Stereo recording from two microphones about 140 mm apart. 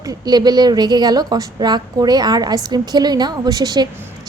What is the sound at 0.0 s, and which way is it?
A woman's voice, 25° right (ahead or behind).